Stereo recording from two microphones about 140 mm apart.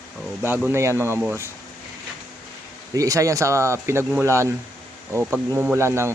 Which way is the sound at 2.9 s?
25° right (ahead or behind).